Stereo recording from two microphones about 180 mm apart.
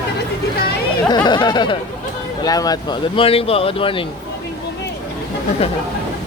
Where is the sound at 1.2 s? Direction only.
25° left (ahead or behind).